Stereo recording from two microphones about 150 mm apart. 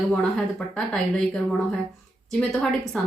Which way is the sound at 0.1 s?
5° left (ahead or behind).